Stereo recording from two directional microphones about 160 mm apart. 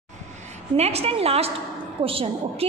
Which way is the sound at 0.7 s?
40° right (ahead or behind).